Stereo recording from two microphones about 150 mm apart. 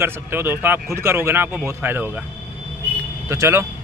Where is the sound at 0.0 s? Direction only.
15° right (ahead or behind).